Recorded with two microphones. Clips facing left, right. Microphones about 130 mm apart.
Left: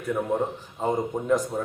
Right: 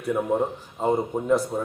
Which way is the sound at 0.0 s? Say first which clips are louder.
Right 2 dB; 10° right (ahead or behind).